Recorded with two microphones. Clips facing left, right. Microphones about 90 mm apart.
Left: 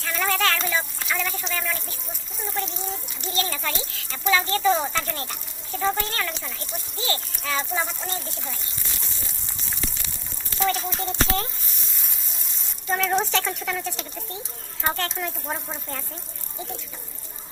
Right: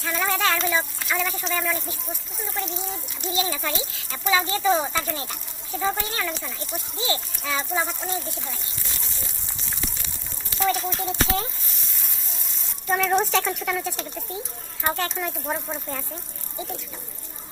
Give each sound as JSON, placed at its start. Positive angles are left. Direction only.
{"t": 0.0, "sound": "a sound", "side_deg": -10}
{"t": 0.9, "sound": "speech", "side_deg": -5}
{"t": 3.2, "sound": "a child's voice", "side_deg": -5}
{"t": 7.0, "sound": "a child's voice", "side_deg": -20}
{"t": 7.5, "sound": "a child's voice", "side_deg": -5}
{"t": 10.6, "sound": "a child's voice", "side_deg": 0}
{"t": 12.9, "sound": "a child's voice", "side_deg": -10}